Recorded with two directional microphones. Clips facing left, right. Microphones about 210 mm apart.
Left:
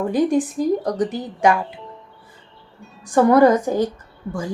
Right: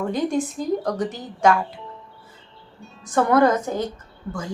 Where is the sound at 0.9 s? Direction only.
15° left (ahead or behind).